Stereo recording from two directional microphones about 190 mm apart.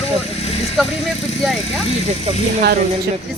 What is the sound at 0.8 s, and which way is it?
Speech, centre (ahead or behind).